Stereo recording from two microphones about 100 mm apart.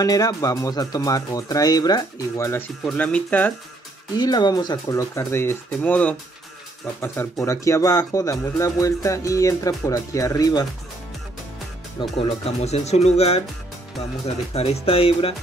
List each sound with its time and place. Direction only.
0.0 s speech: 40° left (ahead or behind)
2.8 s speech: 10° left (ahead or behind)
4.2 s speech: 45° left (ahead or behind); by 5.6 s 25° left (ahead or behind)
5.8 s speech: 10° left (ahead or behind)
7.3 s speech: 30° left (ahead or behind)
12.2 s speech: 80° left